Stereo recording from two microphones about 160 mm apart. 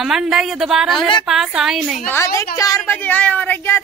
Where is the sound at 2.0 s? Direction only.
15° left (ahead or behind).